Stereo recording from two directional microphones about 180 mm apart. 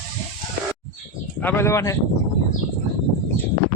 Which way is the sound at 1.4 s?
10° left (ahead or behind).